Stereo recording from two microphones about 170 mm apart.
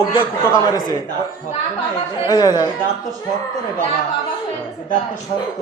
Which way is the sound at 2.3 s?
25° left (ahead or behind).